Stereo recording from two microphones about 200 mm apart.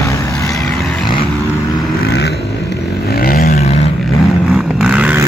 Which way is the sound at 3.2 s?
45° left (ahead or behind).